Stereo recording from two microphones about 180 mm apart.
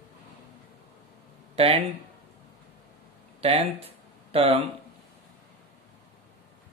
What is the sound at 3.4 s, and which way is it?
Speech, 30° right (ahead or behind).